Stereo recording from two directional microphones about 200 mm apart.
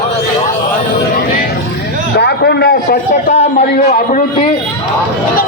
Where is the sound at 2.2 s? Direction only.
55° left (ahead or behind); by 4.2 s 35° left (ahead or behind).